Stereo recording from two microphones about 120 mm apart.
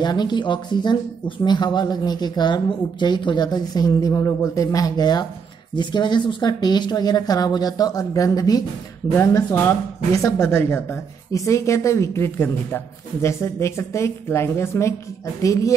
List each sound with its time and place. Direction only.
0.0 s a woman's voice: 35° left (ahead or behind)